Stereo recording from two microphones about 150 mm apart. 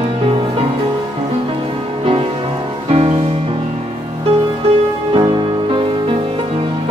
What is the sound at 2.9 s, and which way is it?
Music, 40° right (ahead or behind).